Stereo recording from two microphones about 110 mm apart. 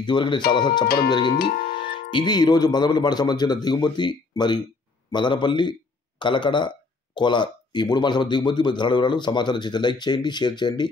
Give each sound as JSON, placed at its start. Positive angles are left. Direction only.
{"t": 0.0, "sound": "a man's voice", "side_deg": 45}